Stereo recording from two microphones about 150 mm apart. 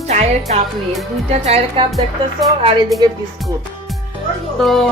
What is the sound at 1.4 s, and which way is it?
Music, 45° right (ahead or behind).